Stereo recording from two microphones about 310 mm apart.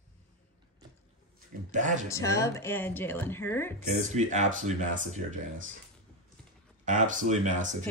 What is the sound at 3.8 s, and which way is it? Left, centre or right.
Speech, right.